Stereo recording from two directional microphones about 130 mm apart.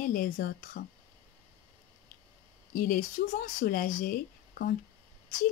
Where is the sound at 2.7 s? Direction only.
90° left.